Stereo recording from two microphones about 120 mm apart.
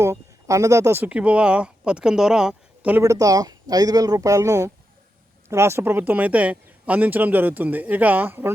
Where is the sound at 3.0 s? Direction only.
30° right (ahead or behind).